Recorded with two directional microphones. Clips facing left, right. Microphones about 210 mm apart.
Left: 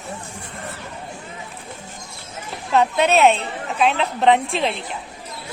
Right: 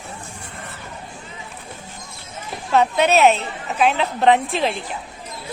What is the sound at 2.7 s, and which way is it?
A woman's voice, centre (ahead or behind).